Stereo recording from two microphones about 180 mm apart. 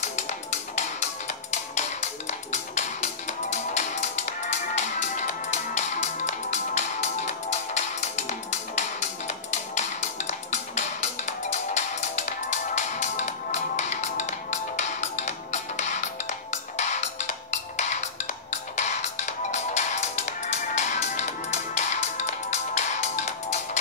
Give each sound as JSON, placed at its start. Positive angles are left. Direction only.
{"t": 0.0, "sound": "music", "side_deg": 40}